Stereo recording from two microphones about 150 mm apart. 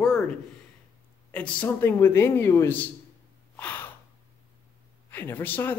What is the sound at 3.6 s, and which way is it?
Gasp, 10° left (ahead or behind).